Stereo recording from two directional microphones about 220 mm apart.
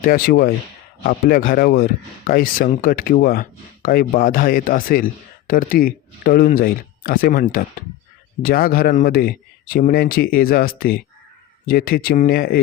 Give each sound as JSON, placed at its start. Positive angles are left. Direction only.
{"t": 0.0, "sound": "speech", "side_deg": 40}